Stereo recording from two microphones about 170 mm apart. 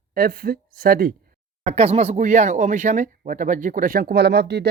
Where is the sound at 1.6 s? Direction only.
35° right (ahead or behind).